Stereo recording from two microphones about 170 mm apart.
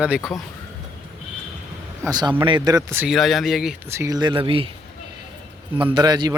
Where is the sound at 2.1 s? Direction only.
25° right (ahead or behind).